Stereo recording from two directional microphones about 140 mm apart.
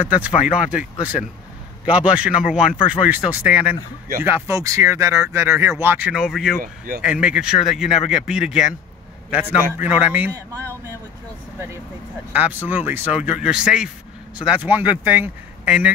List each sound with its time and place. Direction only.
0.0 s speech: 10° right (ahead or behind)
4.2 s speech: 20° right (ahead or behind)
12.3 s speech: 10° right (ahead or behind)